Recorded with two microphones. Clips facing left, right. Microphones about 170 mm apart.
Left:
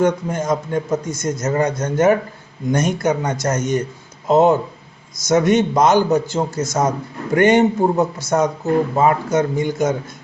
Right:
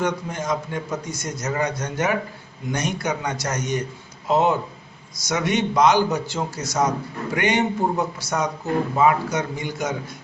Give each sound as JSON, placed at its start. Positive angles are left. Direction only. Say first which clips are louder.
{"t": 0.0, "sound": "a man's voice", "louder": "left 7 dB", "side_deg": 50}